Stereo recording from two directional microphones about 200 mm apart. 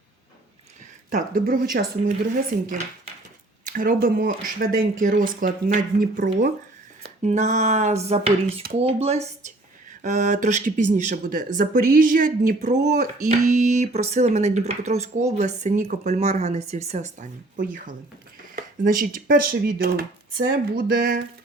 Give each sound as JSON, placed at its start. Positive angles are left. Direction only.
{"t": 1.1, "sound": "speech", "side_deg": -45}